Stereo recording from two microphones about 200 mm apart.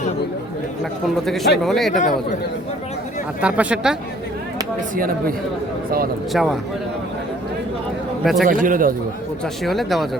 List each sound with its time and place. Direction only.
1.6 s speech: centre (ahead or behind)
2.0 s a man's voice: 40° left (ahead or behind)
3.4 s speech: 5° right (ahead or behind)
4.9 s a man's voice: 45° right (ahead or behind)
6.3 s speech: centre (ahead or behind)
8.2 s speech: centre (ahead or behind)
8.4 s a man's voice: 40° right (ahead or behind)
9.6 s speech: centre (ahead or behind)